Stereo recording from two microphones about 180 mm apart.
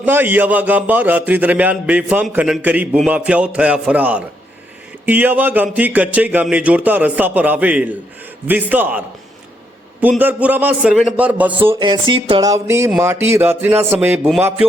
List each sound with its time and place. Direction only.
0.0 s a man's voice: 10° right (ahead or behind)
11.8 s a man's voice: 25° right (ahead or behind); by 14.7 s 5° right (ahead or behind)